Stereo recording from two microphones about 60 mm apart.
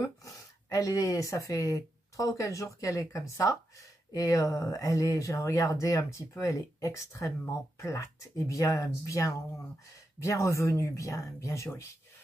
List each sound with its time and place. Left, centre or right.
0.0 s speech: left